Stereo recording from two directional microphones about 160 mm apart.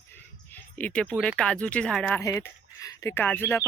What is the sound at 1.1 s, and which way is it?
Speech, 5° left (ahead or behind).